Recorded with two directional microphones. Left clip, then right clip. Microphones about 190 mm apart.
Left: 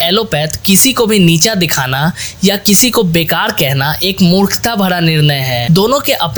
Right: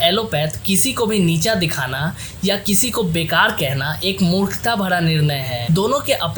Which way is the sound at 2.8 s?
45° left (ahead or behind).